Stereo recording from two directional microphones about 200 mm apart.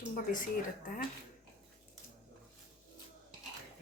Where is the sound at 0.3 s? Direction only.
45° left (ahead or behind).